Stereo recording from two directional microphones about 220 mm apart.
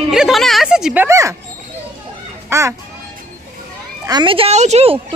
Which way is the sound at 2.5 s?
15° right (ahead or behind).